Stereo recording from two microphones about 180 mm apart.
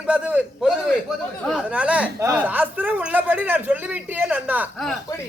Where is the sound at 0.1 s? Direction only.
5° right (ahead or behind).